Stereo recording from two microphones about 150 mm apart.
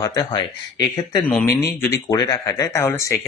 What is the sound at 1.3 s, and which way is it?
Speech, 10° left (ahead or behind).